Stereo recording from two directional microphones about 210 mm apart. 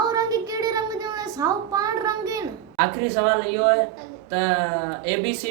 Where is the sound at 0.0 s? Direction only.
20° right (ahead or behind).